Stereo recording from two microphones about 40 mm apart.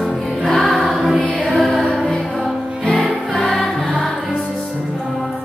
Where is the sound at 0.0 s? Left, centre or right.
Centre.